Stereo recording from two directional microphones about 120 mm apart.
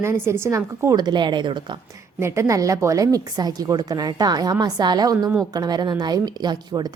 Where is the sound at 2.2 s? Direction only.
25° right (ahead or behind).